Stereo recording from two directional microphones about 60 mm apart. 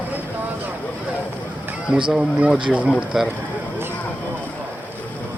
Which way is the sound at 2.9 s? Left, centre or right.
Centre.